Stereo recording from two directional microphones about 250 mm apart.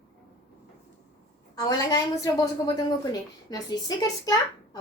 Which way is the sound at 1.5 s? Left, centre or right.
Centre.